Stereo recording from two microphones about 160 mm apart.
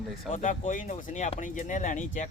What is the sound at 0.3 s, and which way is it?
Speech, 50° left (ahead or behind).